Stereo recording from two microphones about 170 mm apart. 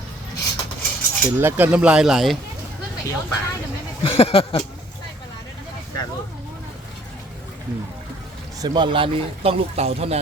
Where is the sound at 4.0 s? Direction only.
35° left (ahead or behind).